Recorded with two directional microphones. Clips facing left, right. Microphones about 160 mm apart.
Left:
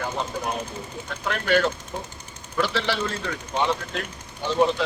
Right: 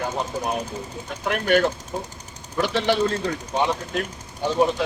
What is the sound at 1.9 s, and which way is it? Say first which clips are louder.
Speech: right 3 dB; 35° right (ahead or behind).